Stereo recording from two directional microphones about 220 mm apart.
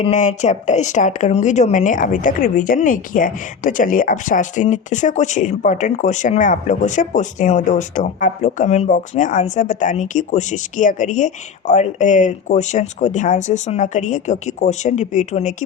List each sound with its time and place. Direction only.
0.0 s a woman's voice: 35° left (ahead or behind)